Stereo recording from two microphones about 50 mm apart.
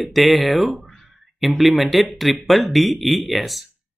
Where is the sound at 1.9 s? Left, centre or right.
Centre.